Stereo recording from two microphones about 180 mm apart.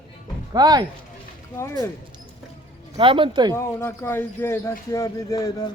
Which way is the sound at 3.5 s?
15° left (ahead or behind).